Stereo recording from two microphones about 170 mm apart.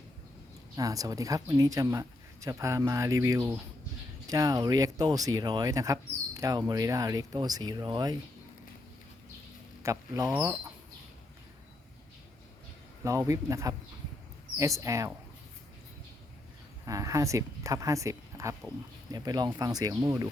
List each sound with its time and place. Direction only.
0.8 s speech: 20° right (ahead or behind)
9.8 s speech: 20° right (ahead or behind)
13.1 s a man's voice: 20° right (ahead or behind)
16.8 s speech: 20° right (ahead or behind)